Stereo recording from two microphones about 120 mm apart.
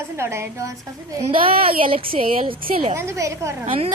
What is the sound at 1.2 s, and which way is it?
A woman's voice, 50° right (ahead or behind).